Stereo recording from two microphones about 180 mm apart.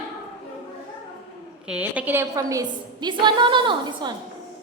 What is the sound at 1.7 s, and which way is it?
A woman's voice, 10° right (ahead or behind).